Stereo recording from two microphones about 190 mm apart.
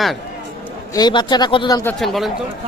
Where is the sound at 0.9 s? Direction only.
20° left (ahead or behind).